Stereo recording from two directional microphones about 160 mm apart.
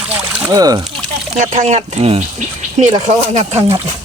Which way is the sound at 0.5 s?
25° right (ahead or behind).